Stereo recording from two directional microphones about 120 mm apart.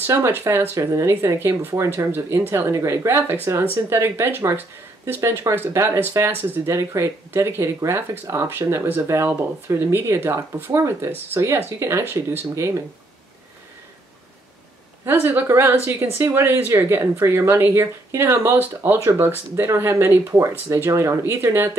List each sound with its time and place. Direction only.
0.0 s speech: 20° right (ahead or behind)
15.2 s speech: 20° right (ahead or behind)